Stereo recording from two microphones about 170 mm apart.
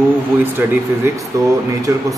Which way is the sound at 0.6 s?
10° right (ahead or behind).